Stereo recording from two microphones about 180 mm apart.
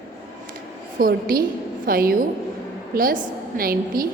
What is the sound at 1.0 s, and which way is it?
A woman's voice, 55° right (ahead or behind).